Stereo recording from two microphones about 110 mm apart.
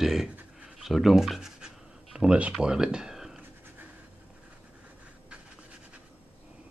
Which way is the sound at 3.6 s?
15° right (ahead or behind).